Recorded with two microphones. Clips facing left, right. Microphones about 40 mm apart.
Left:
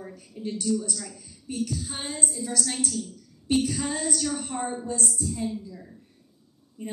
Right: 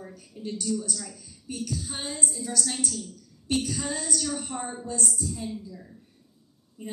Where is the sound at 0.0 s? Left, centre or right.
Centre.